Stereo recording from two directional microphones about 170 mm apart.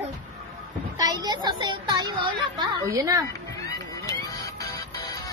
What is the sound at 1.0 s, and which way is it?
A woman's voice, 20° right (ahead or behind).